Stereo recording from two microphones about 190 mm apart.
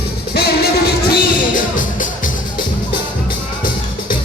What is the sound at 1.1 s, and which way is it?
Music, 45° left (ahead or behind).